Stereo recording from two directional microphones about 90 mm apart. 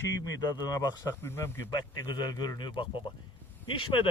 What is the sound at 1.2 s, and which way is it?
Speech, 25° left (ahead or behind).